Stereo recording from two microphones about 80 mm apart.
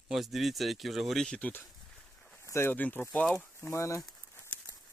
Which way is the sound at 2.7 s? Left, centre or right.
Left.